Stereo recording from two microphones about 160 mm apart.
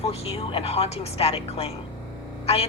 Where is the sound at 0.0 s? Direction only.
40° left (ahead or behind).